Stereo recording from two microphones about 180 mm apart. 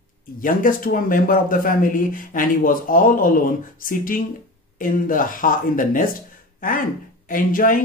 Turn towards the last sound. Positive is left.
turn(degrees=50)  # may be behind; listen again after turning